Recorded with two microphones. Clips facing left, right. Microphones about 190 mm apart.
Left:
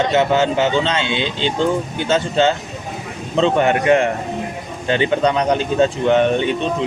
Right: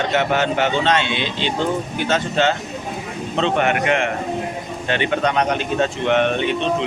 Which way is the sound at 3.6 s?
35° left (ahead or behind).